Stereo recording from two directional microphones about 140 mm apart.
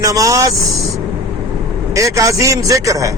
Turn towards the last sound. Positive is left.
turn(degrees=-25)  # may be behind; listen again after turning